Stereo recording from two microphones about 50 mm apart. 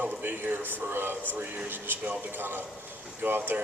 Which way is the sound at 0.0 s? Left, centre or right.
Right.